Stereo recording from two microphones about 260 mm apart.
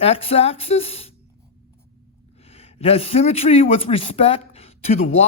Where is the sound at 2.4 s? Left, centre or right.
Left.